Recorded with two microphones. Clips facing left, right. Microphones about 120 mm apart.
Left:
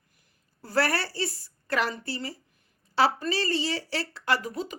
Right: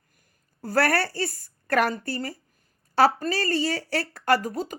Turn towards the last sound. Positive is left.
turn(degrees=-50)  # may be behind; listen again after turning